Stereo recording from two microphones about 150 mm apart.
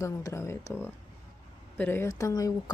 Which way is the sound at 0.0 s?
20° left (ahead or behind).